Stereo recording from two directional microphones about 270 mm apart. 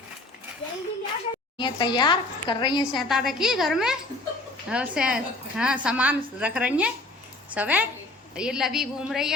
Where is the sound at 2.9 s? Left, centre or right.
Centre.